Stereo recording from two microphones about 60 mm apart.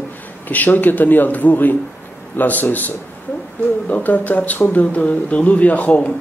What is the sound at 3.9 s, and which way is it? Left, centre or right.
Speech, left.